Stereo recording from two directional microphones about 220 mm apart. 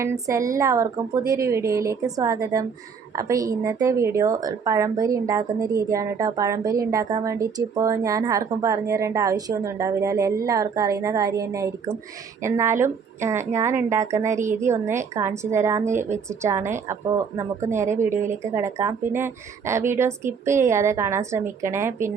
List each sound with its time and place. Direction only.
0.0 s speech: 15° right (ahead or behind)